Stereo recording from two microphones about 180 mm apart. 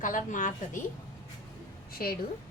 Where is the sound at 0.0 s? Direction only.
45° left (ahead or behind).